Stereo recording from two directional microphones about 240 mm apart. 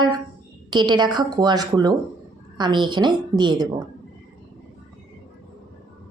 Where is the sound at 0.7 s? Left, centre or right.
Centre.